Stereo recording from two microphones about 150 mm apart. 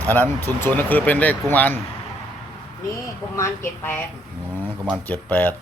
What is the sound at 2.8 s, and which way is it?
Speech, 20° left (ahead or behind).